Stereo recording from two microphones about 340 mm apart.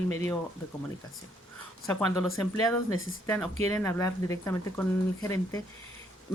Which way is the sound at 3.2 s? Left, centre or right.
Centre.